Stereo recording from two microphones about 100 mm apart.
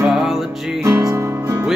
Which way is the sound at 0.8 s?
35° right (ahead or behind).